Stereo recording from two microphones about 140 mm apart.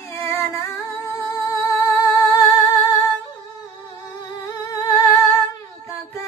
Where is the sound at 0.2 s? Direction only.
20° left (ahead or behind).